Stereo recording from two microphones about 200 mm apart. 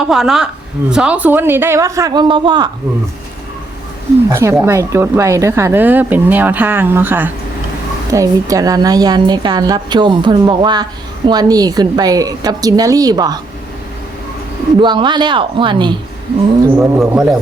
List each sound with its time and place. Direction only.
0.1 s a woman's voice: centre (ahead or behind); by 2.6 s 25° right (ahead or behind)
4.3 s a woman's voice: 15° right (ahead or behind)
14.8 s a woman's voice: 25° right (ahead or behind)
16.7 s speech: 5° right (ahead or behind)